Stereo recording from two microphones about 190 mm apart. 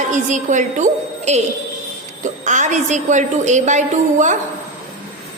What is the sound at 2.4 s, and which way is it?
A woman's voice, 40° right (ahead or behind).